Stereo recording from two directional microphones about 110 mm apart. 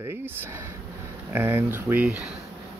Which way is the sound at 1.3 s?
20° right (ahead or behind).